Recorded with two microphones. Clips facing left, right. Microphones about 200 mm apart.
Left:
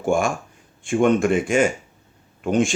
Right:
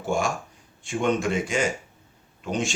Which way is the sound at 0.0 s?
50° left (ahead or behind).